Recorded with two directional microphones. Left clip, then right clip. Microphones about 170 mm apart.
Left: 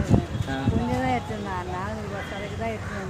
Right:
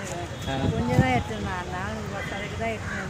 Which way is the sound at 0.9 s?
20° left (ahead or behind).